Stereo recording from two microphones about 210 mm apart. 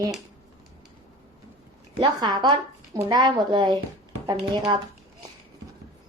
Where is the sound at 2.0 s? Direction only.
20° right (ahead or behind).